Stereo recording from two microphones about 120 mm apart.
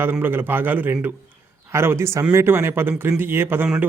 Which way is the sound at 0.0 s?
15° right (ahead or behind).